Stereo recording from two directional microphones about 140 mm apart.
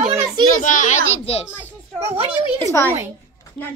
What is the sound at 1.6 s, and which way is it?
Children playing, 15° right (ahead or behind).